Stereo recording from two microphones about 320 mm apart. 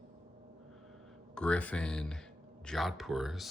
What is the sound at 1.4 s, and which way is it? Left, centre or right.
Speech, centre.